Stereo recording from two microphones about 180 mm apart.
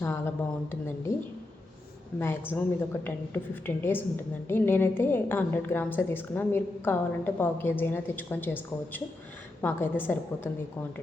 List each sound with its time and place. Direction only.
0.0 s a woman's voice: 15° left (ahead or behind)
2.1 s a woman's voice: 10° left (ahead or behind)
9.6 s a woman's voice: 10° left (ahead or behind)